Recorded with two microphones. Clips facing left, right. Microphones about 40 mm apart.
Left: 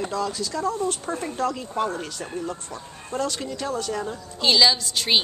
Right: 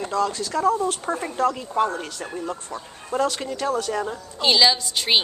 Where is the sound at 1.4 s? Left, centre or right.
Centre.